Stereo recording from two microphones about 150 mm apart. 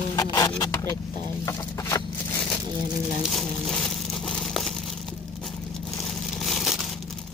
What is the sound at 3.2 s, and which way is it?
Crumpling, centre (ahead or behind).